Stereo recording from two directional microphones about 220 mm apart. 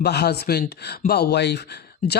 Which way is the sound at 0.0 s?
50° left (ahead or behind).